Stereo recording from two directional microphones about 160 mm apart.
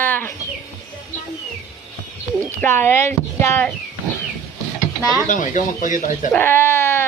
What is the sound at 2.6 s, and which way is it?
Speech, 15° left (ahead or behind).